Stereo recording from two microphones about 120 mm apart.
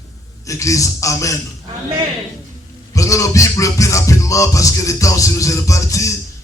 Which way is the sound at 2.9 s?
25° left (ahead or behind).